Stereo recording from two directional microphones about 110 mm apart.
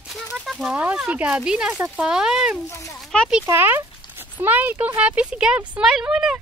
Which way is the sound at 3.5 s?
20° right (ahead or behind).